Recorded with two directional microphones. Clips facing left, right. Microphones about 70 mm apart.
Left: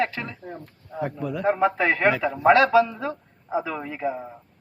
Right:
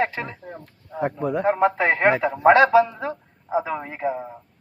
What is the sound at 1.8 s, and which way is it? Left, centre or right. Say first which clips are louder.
A man's voice: right 2 dB; right.